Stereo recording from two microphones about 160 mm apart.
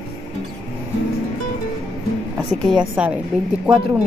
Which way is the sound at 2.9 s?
10° right (ahead or behind).